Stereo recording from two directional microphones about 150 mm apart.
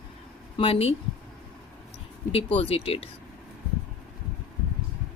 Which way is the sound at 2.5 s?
40° left (ahead or behind).